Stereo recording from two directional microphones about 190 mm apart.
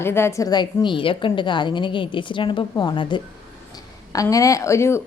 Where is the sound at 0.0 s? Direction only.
10° left (ahead or behind).